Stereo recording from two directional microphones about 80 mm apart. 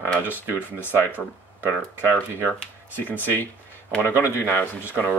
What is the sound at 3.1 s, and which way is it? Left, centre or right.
Speech, left.